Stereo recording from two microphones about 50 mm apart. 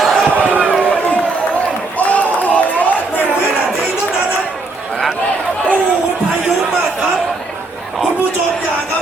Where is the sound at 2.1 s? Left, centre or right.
Left.